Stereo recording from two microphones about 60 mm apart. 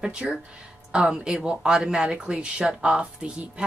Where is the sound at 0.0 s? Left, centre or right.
Centre.